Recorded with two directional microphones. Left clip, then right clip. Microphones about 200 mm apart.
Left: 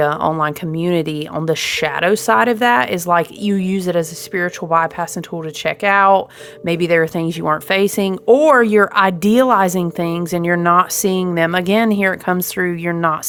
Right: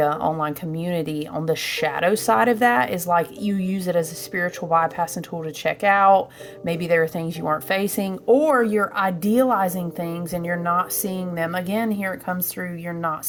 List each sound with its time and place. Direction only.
0.0 s speech: 30° left (ahead or behind)
8.3 s speech: 40° left (ahead or behind)